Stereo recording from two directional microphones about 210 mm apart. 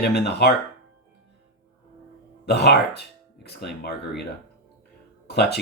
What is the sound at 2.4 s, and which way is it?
Speech, 50° left (ahead or behind).